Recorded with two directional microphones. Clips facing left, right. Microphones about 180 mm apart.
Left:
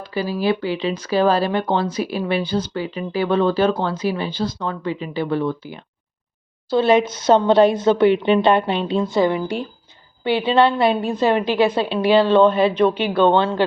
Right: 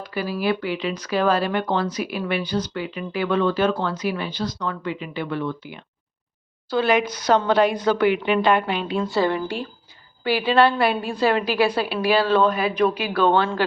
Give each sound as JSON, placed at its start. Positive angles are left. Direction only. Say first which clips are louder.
{"t": 0.0, "sound": "speech", "louder": "left 3 dB", "side_deg": 30}